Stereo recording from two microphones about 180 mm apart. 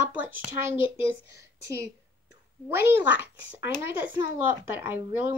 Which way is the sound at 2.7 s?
15° right (ahead or behind).